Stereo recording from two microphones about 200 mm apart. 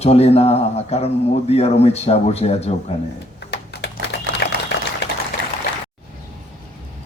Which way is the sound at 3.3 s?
55° left (ahead or behind).